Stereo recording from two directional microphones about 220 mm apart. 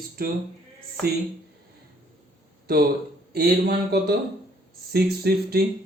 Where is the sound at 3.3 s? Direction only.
45° right (ahead or behind).